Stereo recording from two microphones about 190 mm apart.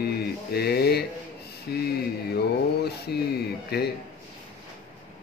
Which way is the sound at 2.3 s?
60° left (ahead or behind).